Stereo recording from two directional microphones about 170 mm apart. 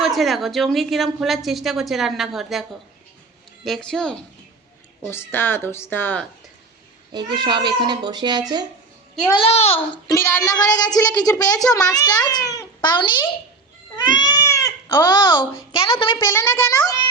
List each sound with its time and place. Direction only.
0.0 s a woman's voice: centre (ahead or behind)
7.1 s a child's voice: 25° right (ahead or behind)
9.3 s a child's voice: 35° left (ahead or behind)
10.1 s a woman's voice: 15° left (ahead or behind)
16.3 s speech: 10° left (ahead or behind)